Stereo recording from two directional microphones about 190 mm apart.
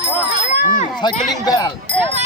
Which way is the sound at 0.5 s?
45° left (ahead or behind).